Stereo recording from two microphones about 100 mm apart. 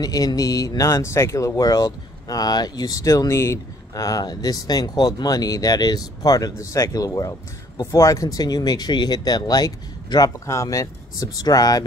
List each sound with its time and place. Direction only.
0.0 s speech: 40° left (ahead or behind)